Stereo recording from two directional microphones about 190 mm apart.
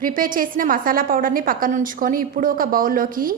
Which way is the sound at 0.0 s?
45° right (ahead or behind).